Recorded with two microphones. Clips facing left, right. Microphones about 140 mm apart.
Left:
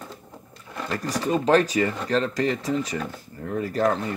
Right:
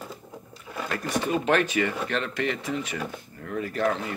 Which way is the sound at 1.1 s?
35° left (ahead or behind).